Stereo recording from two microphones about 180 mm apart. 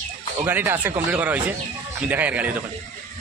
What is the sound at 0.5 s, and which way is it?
A man's voice, 10° right (ahead or behind).